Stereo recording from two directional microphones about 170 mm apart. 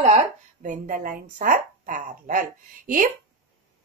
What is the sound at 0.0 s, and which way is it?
Speech, 40° right (ahead or behind).